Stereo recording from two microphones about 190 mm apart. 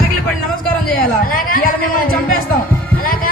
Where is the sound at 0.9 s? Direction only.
50° left (ahead or behind).